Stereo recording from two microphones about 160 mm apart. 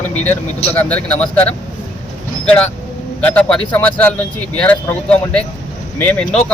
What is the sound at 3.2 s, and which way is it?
A man's voice, 10° left (ahead or behind).